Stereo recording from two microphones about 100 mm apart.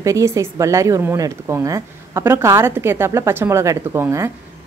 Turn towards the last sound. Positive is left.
turn(degrees=-25)  # may be behind; listen again after turning